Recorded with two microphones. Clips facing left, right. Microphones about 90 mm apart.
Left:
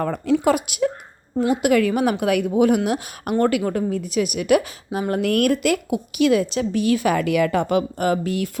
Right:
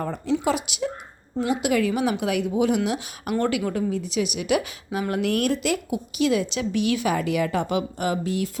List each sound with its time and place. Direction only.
0.0 s a woman's voice: 55° left (ahead or behind)
4.9 s a woman's voice: 35° left (ahead or behind); by 8.4 s 60° left (ahead or behind)